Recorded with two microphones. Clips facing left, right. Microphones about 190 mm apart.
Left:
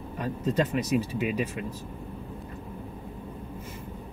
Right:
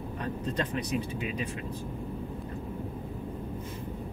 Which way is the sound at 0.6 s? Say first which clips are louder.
Left 6 dB; 5° left (ahead or behind).